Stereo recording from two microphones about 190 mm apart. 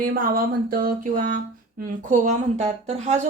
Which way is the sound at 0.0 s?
50° right (ahead or behind).